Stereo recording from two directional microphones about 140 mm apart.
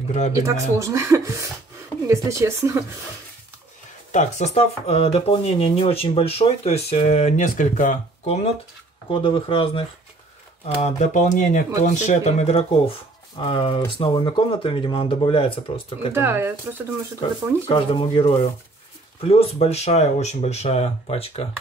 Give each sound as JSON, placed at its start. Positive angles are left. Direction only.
{"t": 0.3, "sound": "speech", "side_deg": -20}
{"t": 4.1, "sound": "speech", "side_deg": 55}
{"t": 9.1, "sound": "speech", "side_deg": 40}
{"t": 10.8, "sound": "speech", "side_deg": 55}
{"t": 13.4, "sound": "speech", "side_deg": 40}
{"t": 16.1, "sound": "speech", "side_deg": -15}
{"t": 17.6, "sound": "speech", "side_deg": 40}